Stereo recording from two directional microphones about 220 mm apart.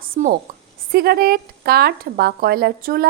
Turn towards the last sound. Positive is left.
turn(degrees=-40)  # may be behind; listen again after turning